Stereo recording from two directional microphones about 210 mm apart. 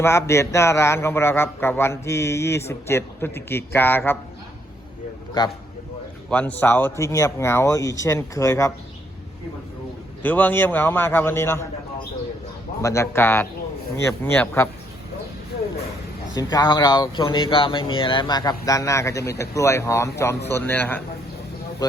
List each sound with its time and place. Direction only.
0.0 s a man's voice: 10° left (ahead or behind)
6.3 s a man's voice: 5° left (ahead or behind)
10.2 s a man's voice: 10° left (ahead or behind)
12.8 s a man's voice: 15° left (ahead or behind)
16.3 s a man's voice: 20° left (ahead or behind)